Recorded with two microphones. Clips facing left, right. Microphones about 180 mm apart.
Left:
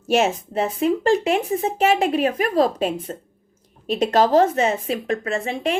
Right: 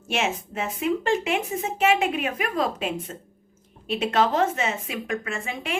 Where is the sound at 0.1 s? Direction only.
40° left (ahead or behind).